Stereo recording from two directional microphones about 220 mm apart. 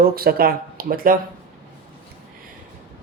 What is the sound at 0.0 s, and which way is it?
Speech, 45° right (ahead or behind).